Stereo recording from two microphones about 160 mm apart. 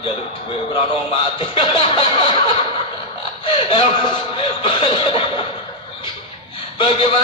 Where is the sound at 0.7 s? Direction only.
30° left (ahead or behind).